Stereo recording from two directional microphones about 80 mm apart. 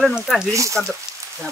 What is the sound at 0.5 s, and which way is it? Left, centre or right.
Speech, right.